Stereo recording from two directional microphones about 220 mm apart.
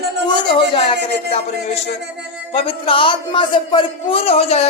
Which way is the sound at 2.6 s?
25° left (ahead or behind).